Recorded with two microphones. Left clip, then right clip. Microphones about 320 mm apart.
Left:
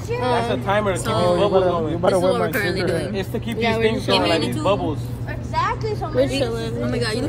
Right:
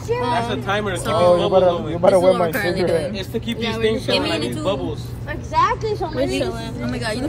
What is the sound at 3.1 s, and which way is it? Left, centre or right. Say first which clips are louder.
Speech: even; centre.